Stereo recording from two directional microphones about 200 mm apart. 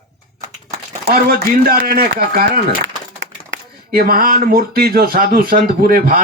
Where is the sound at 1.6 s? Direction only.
50° right (ahead or behind).